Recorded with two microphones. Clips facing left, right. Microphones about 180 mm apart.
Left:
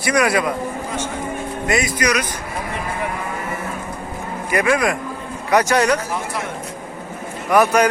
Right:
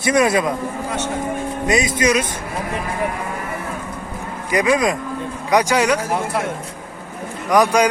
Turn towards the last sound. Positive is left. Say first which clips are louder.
# even
turn(degrees=-15)  # may be behind; listen again after turning